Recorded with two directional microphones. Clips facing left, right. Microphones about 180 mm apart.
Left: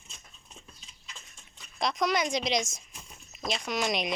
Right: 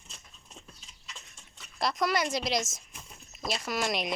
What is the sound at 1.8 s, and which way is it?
Speech, 5° right (ahead or behind).